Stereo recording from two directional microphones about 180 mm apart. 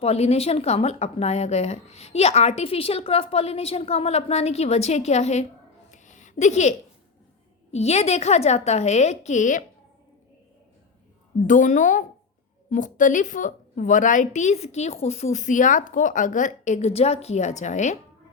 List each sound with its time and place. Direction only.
0.0 s a woman's voice: 35° left (ahead or behind)
5.9 s a sound: 45° left (ahead or behind)
7.7 s a woman's voice: 35° left (ahead or behind)
11.4 s a woman's voice: 45° left (ahead or behind)